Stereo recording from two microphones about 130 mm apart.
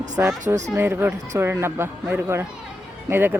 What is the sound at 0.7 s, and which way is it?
Speech, 15° right (ahead or behind).